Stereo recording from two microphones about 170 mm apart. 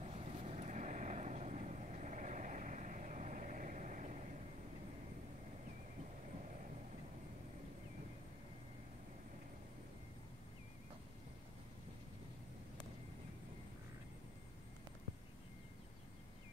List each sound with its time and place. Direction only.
0.0 s vehicle: 35° right (ahead or behind)